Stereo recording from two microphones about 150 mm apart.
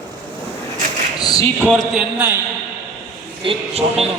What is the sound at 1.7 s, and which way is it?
Speech, 5° left (ahead or behind).